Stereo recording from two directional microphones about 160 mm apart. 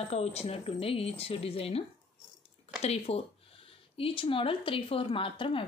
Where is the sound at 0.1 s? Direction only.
40° left (ahead or behind).